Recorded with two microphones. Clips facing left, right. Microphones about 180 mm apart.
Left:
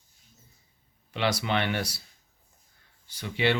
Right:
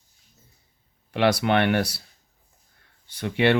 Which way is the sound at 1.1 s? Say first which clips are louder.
Right 7 dB; 60° right (ahead or behind).